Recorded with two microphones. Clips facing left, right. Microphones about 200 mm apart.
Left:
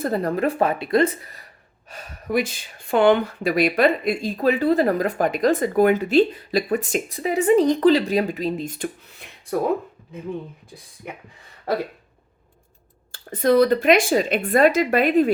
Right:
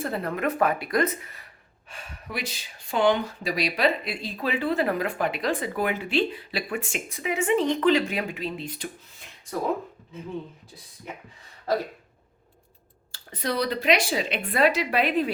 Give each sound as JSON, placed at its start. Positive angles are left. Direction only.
{"t": 0.0, "sound": "speech", "side_deg": 40}
{"t": 13.1, "sound": "speech", "side_deg": 50}